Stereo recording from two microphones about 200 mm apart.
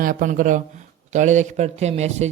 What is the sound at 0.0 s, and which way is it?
Speech, 45° right (ahead or behind).